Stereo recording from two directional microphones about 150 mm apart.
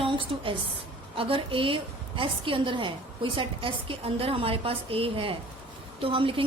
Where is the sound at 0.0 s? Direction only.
35° right (ahead or behind).